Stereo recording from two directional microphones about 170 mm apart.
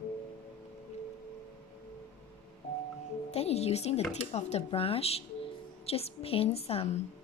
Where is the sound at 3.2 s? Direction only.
40° left (ahead or behind).